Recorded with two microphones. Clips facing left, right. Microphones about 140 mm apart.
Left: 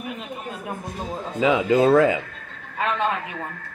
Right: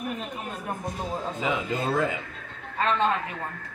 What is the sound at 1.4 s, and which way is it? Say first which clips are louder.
Speech: left 12 dB; 90° left.